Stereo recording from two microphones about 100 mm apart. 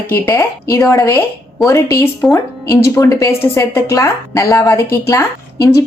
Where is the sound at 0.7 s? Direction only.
30° left (ahead or behind).